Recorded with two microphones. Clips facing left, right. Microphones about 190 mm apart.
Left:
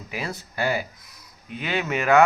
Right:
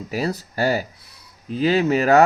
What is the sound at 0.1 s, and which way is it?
Speech, 40° right (ahead or behind).